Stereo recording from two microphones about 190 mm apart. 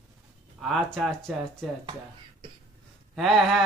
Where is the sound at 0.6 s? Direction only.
Centre (ahead or behind).